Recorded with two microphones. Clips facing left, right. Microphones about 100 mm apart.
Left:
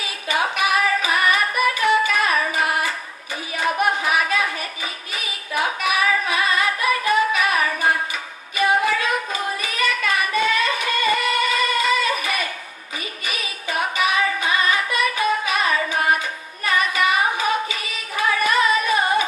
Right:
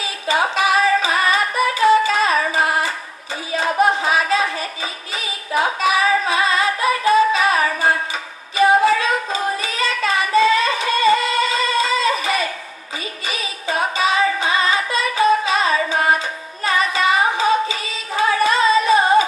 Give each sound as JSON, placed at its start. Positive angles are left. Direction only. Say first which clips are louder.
{"t": 0.0, "sound": "singing", "louder": "right 4 dB", "side_deg": -25}
{"t": 3.5, "sound": "music", "louder": "right 4 dB", "side_deg": -25}
{"t": 16.6, "sound": "singing", "louder": "right 2 dB", "side_deg": -25}